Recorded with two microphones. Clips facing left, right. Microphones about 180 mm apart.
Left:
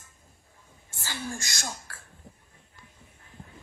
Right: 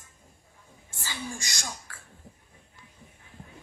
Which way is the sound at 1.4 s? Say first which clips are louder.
Left 2 dB; 55° left (ahead or behind).